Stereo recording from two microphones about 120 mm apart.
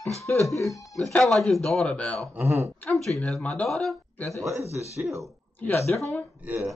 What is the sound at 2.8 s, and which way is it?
Speech, 5° left (ahead or behind).